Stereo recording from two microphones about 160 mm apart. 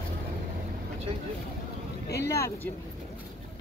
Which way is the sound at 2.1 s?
90° left.